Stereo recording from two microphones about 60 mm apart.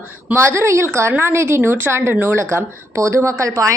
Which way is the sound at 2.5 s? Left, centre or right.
Right.